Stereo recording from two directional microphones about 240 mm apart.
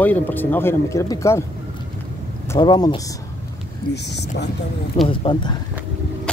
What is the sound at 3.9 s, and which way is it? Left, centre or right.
Speech, left.